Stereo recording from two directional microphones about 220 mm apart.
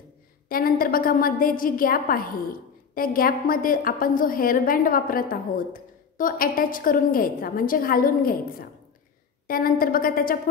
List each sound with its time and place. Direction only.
0.5 s a woman's voice: 40° left (ahead or behind)